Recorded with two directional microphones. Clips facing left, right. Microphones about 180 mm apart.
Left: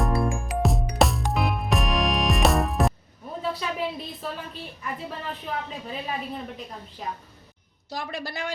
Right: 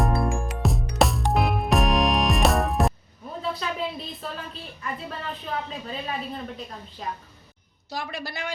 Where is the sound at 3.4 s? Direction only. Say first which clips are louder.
Even; 10° left (ahead or behind).